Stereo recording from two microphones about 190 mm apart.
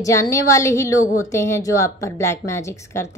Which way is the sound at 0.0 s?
15° left (ahead or behind).